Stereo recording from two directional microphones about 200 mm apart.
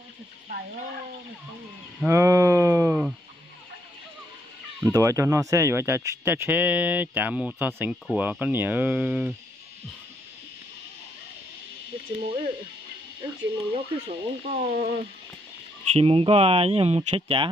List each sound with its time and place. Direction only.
2.0 s livestock: 15° right (ahead or behind)
4.8 s speech: 15° right (ahead or behind)
12.2 s speech: 25° right (ahead or behind)
15.9 s speech: 30° right (ahead or behind)